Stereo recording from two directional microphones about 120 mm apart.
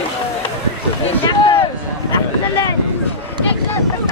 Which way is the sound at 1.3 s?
45° left (ahead or behind).